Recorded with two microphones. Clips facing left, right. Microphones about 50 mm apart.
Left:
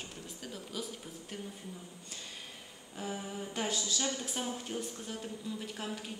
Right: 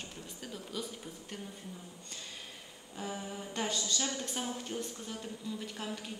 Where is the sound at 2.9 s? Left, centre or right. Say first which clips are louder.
Left 1 dB; centre.